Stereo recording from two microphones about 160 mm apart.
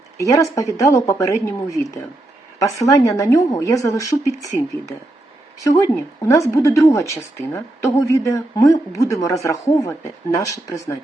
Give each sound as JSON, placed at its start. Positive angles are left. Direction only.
{"t": 0.2, "sound": "speech", "side_deg": 20}
{"t": 5.5, "sound": "speech", "side_deg": 20}